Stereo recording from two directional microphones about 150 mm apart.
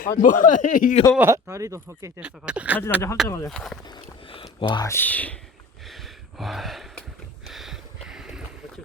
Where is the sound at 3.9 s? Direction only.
35° left (ahead or behind).